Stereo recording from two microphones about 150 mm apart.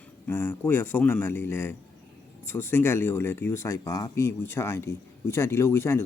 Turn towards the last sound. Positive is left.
turn(degrees=15)  # may be behind; listen again after turning